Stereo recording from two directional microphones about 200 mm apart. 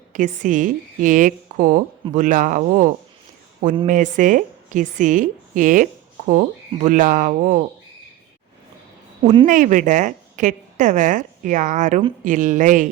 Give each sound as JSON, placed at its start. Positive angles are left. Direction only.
{"t": 0.1, "sound": "a woman's voice", "side_deg": -40}
{"t": 9.5, "sound": "a woman's voice", "side_deg": -40}